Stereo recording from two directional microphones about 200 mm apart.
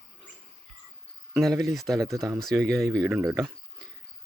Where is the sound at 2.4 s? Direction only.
Centre (ahead or behind).